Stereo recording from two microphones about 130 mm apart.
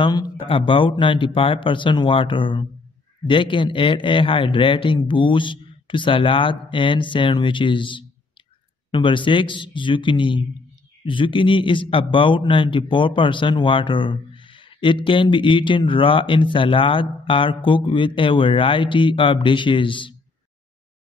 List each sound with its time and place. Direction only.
0.0 s a man's voice: 30° left (ahead or behind)
0.5 s a man's voice: 40° left (ahead or behind)